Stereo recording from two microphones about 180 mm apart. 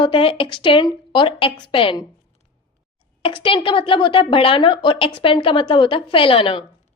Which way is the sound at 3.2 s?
30° left (ahead or behind).